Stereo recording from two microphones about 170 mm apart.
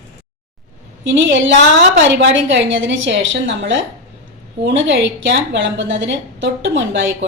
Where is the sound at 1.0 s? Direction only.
90° right.